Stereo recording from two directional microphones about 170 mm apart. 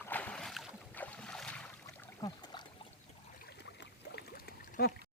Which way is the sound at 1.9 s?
15° left (ahead or behind).